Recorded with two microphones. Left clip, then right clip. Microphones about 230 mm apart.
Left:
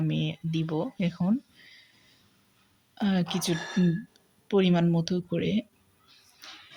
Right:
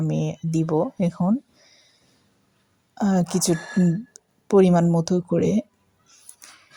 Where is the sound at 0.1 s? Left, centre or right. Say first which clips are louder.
Right 6 dB; right.